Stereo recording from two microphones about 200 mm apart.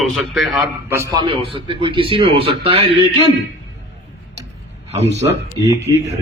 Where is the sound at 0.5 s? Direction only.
15° right (ahead or behind).